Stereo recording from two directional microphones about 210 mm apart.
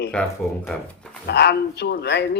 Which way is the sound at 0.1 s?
5° left (ahead or behind).